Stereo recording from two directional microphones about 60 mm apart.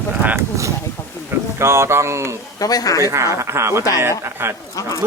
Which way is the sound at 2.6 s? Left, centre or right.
Left.